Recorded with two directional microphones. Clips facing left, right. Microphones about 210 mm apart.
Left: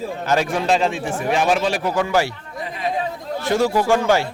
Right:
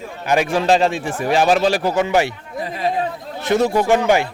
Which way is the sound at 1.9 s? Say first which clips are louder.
Right 2 dB; 20° right (ahead or behind).